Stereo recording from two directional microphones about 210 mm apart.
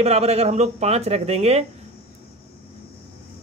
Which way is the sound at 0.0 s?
30° right (ahead or behind).